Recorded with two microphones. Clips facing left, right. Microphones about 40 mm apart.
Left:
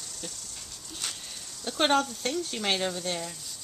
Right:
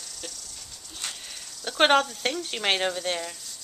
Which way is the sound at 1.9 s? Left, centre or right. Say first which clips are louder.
Right 4 dB; right.